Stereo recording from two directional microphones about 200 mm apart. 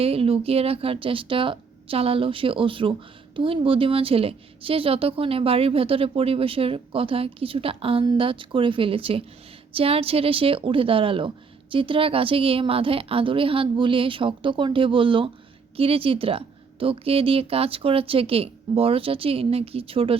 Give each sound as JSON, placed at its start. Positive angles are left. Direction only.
{"t": 0.0, "sound": "a woman's voice", "side_deg": -30}